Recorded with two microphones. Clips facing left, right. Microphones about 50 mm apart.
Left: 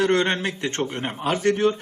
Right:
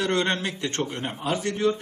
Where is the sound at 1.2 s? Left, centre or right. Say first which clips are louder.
Left 4 dB; left.